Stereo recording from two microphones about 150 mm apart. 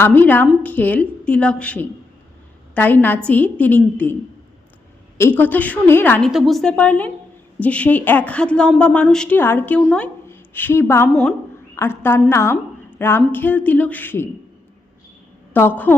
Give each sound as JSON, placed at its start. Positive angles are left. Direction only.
{"t": 0.0, "sound": "a woman's voice", "side_deg": 10}
{"t": 11.1, "sound": "a woman's voice", "side_deg": 0}
{"t": 11.7, "sound": "a woman's voice", "side_deg": 15}
{"t": 15.5, "sound": "a woman's voice", "side_deg": 15}